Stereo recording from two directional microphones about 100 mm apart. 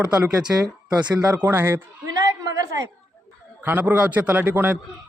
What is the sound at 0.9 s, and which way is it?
Speech, 10° right (ahead or behind).